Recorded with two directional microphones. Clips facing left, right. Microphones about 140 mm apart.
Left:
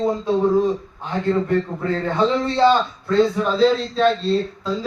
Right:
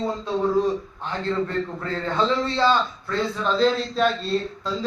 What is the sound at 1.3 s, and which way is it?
Speech, 15° left (ahead or behind).